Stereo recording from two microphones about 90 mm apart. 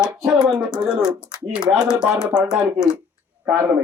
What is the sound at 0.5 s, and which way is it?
Speech, 10° right (ahead or behind).